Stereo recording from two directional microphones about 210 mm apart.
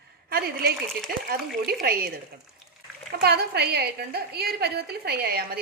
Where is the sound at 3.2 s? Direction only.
50° right (ahead or behind).